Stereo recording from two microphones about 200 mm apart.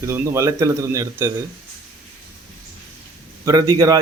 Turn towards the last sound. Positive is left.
turn(degrees=-15)  # may be behind; listen again after turning